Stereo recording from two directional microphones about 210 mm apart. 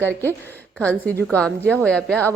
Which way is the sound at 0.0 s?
10° left (ahead or behind).